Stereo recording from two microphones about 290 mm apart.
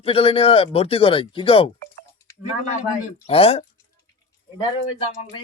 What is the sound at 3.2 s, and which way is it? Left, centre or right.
Speech, centre.